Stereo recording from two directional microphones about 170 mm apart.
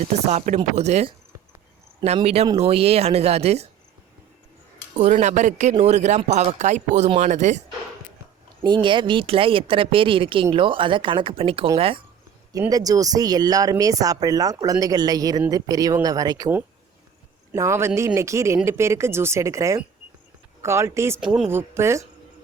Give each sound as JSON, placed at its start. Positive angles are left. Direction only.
{"t": 0.3, "sound": "speech", "side_deg": -45}
{"t": 2.1, "sound": "speech", "side_deg": -35}
{"t": 4.9, "sound": "speech", "side_deg": -45}
{"t": 8.6, "sound": "speech", "side_deg": -30}
{"t": 12.5, "sound": "speech", "side_deg": -20}
{"t": 17.5, "sound": "speech", "side_deg": -15}
{"t": 21.2, "sound": "speech", "side_deg": -5}
{"t": 21.5, "sound": "speech", "side_deg": -15}